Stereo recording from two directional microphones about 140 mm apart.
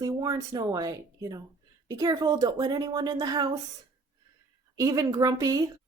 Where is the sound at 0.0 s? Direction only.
25° right (ahead or behind).